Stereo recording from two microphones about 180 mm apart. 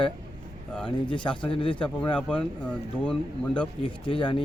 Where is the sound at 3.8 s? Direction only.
25° left (ahead or behind).